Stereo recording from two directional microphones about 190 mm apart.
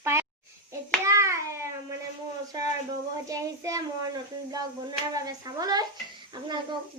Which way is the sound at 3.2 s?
15° right (ahead or behind).